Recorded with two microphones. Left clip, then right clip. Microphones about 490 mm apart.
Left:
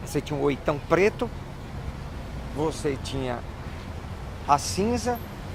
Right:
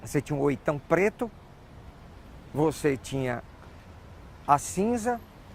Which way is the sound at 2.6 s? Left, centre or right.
Right.